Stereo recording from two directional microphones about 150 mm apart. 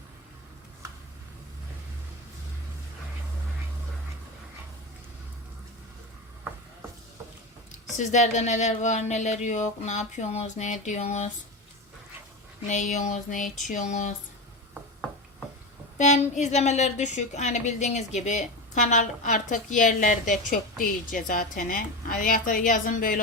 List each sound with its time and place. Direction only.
7.9 s speech: 50° left (ahead or behind)
12.6 s a woman's voice: 55° left (ahead or behind)
16.0 s a woman's voice: 50° left (ahead or behind)